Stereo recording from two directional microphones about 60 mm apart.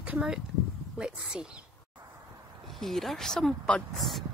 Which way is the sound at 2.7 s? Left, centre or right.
Centre.